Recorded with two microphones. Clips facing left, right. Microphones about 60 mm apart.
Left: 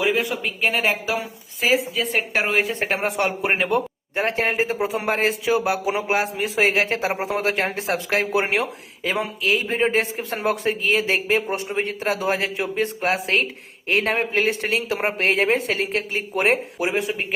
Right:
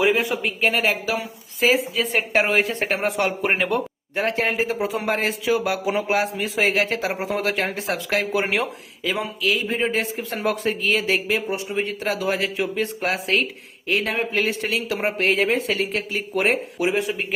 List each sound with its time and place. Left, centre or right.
0.1 s a woman's voice: centre
4.1 s a man's voice: left